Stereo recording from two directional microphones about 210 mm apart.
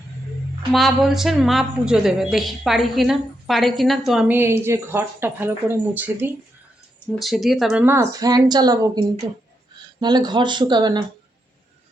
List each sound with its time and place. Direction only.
0.7 s a woman's voice: centre (ahead or behind); by 11.0 s 20° right (ahead or behind)